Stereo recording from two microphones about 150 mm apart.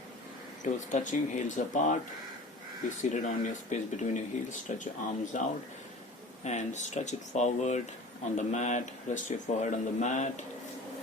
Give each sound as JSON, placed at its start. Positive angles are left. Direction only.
{"t": 0.6, "sound": "speech", "side_deg": 55}
{"t": 3.0, "sound": "speech", "side_deg": 55}